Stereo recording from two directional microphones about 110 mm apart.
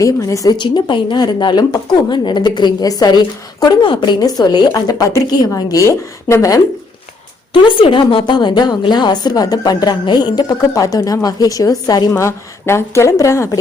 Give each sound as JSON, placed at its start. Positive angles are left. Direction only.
{"t": 0.0, "sound": "a woman's voice", "side_deg": 30}
{"t": 0.5, "sound": "speech", "side_deg": 45}
{"t": 7.5, "sound": "a woman's voice", "side_deg": 50}
{"t": 12.1, "sound": "a woman's voice", "side_deg": 25}